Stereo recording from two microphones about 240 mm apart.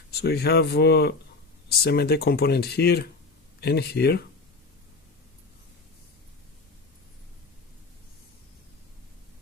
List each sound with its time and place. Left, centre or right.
0.1 s speech: left